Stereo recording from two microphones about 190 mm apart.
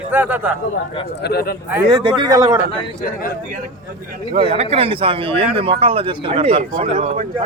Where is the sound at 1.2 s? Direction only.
55° left (ahead or behind).